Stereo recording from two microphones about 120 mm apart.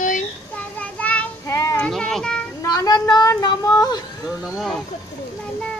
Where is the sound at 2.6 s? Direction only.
30° left (ahead or behind).